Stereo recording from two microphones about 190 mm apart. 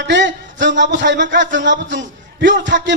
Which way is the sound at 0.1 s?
70° right (ahead or behind).